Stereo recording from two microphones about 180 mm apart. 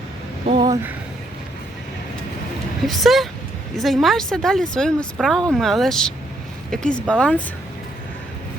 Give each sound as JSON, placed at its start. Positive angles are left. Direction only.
{"t": 0.4, "sound": "a sound", "side_deg": -25}
{"t": 2.8, "sound": "speech", "side_deg": 0}
{"t": 7.1, "sound": "speech", "side_deg": 5}